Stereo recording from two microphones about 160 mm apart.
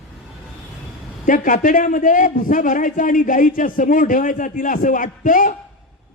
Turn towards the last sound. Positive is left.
turn(degrees=55)  # may be behind; listen again after turning